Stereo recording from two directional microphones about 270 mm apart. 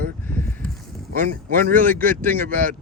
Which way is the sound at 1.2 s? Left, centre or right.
Right.